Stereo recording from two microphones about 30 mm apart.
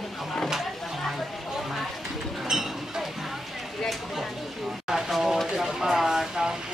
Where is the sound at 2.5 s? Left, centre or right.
Centre.